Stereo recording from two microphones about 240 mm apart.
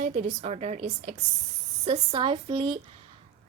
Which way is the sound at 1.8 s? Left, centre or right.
Right.